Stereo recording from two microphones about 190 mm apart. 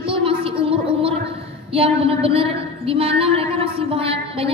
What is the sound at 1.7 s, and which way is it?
A woman's voice, 30° right (ahead or behind).